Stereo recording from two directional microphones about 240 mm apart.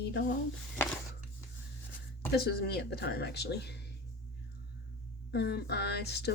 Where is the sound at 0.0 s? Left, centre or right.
Left.